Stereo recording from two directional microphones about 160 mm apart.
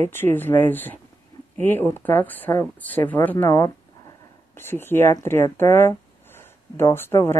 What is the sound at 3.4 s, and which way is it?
Speech, 20° left (ahead or behind).